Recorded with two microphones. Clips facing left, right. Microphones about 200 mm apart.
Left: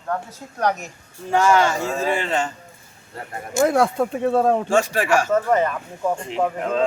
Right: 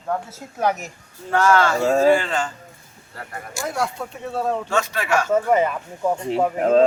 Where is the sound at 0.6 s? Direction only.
5° right (ahead or behind).